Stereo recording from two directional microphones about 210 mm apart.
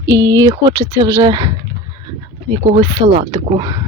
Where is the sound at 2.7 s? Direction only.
25° right (ahead or behind).